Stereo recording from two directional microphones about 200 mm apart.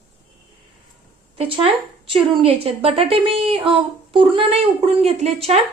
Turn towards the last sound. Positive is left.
turn(degrees=-30)  # may be behind; listen again after turning